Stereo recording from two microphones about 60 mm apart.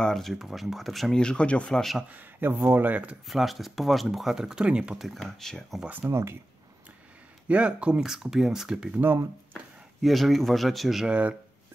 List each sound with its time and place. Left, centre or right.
0.0 s speech: centre
1.2 s speech: centre
1.7 s a man's voice: centre
2.0 s speech: right
3.3 s speech: centre
4.9 s speech: centre
6.0 s speech: right
7.4 s speech: centre
8.0 s speech: centre
8.9 s speech: right
10.0 s speech: centre
11.1 s speech: right